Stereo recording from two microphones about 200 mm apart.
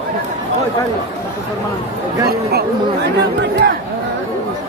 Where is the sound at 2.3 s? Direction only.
50° right (ahead or behind).